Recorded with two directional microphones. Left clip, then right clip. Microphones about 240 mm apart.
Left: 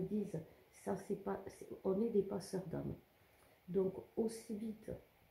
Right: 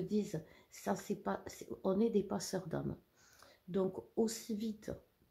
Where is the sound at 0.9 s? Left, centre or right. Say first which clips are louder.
Right 3 dB; right.